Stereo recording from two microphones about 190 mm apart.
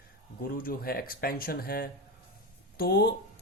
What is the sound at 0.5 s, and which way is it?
Speech, 50° left (ahead or behind).